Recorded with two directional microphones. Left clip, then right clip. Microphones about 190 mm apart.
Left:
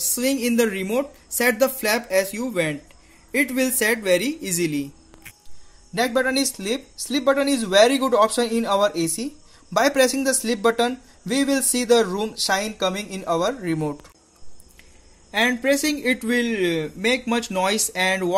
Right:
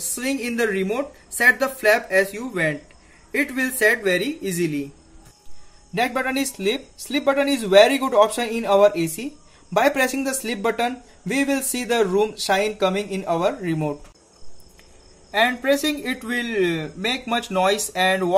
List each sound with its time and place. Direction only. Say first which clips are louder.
0.1 s speech: left 3 dB; 35° left (ahead or behind)
5.9 s speech: left 1 dB; 25° left (ahead or behind)
15.3 s speech: right 1 dB; 35° left (ahead or behind)